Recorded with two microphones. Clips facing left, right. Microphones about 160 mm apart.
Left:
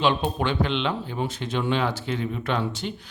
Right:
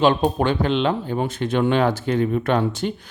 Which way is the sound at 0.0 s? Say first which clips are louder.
Right 6 dB; 45° right (ahead or behind).